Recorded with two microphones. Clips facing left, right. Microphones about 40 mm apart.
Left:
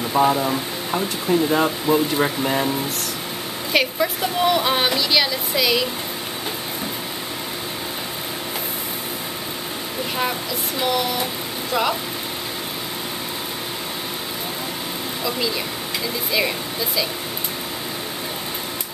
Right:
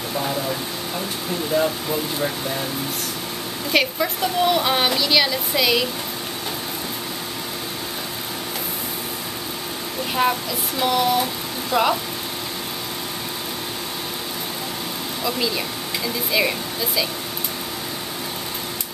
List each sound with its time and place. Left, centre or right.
0.2 s speech: left
1.5 s speech: left
3.7 s speech: centre
10.8 s speech: centre
16.3 s speech: centre